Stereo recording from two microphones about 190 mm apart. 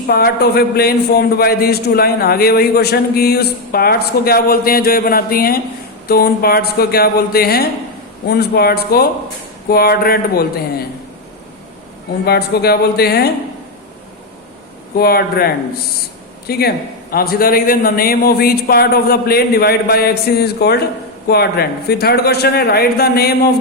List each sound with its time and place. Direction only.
0.1 s a man's voice: 55° left (ahead or behind)
12.2 s a man's voice: 55° left (ahead or behind)
14.9 s a man's voice: 55° left (ahead or behind)